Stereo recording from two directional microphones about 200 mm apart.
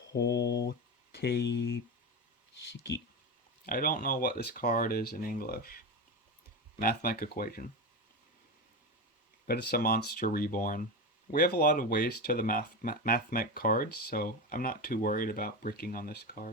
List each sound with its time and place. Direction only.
0.1 s mantra: 60° left (ahead or behind)
1.1 s speech: 55° left (ahead or behind)
3.7 s speech: 45° left (ahead or behind)
9.5 s speech: 50° left (ahead or behind)